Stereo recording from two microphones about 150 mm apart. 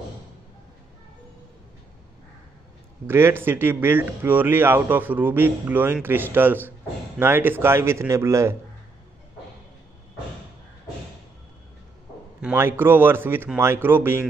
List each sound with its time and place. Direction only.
3.1 s speech: 15° right (ahead or behind)
12.5 s speech: 15° right (ahead or behind)